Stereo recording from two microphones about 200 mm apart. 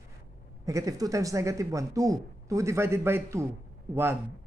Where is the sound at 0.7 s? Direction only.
15° right (ahead or behind).